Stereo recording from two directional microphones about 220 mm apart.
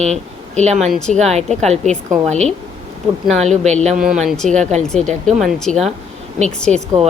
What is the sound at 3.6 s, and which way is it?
Speech, 30° right (ahead or behind).